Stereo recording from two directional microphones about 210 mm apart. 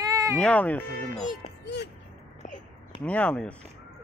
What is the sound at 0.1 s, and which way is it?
Music, 15° right (ahead or behind).